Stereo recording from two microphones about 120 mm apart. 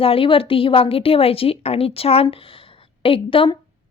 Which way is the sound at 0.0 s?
50° left (ahead or behind).